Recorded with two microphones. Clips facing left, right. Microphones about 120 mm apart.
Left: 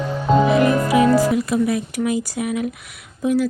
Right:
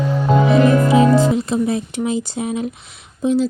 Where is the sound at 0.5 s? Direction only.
25° right (ahead or behind).